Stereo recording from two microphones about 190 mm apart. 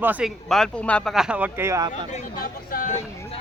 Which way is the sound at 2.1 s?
45° left (ahead or behind).